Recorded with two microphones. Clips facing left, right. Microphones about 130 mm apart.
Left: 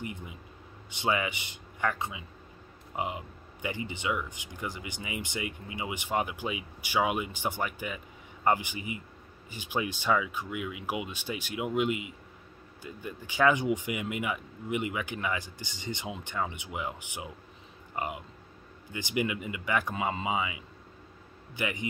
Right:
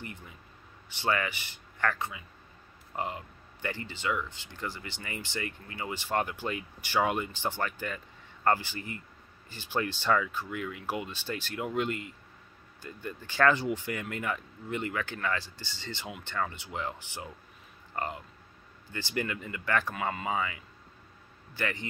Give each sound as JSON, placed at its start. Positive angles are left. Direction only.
{"t": 0.0, "sound": "speech", "side_deg": 15}